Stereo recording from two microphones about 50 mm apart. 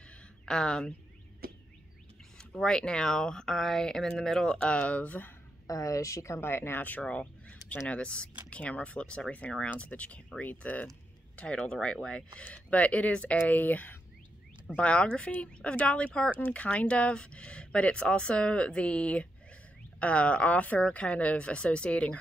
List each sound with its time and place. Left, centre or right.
0.5 s speech: centre
2.3 s speech: centre; by 5.3 s left
5.7 s speech: left
6.4 s speech: left
6.8 s speech: left
7.1 s fowl: left
7.9 s speech: left
12.5 s speech: left
14.8 s speech: left